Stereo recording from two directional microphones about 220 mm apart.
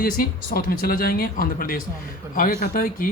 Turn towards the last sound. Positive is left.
turn(degrees=40)  # may be behind; listen again after turning